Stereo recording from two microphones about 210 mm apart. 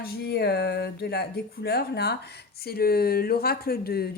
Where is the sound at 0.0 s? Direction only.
50° left (ahead or behind).